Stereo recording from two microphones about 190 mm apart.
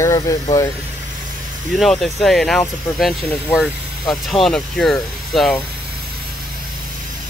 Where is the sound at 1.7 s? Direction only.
Centre (ahead or behind).